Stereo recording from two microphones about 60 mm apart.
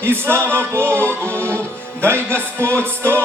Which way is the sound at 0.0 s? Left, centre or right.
Right.